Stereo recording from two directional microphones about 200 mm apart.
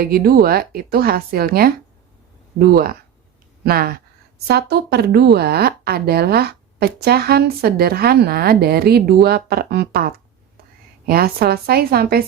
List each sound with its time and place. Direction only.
0.0 s a woman's voice: 50° right (ahead or behind)